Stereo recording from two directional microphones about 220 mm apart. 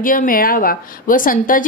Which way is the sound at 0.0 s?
40° left (ahead or behind).